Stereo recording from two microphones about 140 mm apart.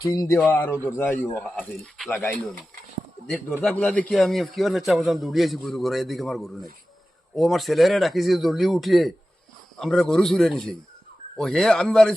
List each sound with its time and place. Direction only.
0.0 s speech: 20° left (ahead or behind)
3.6 s a man's voice: 5° left (ahead or behind)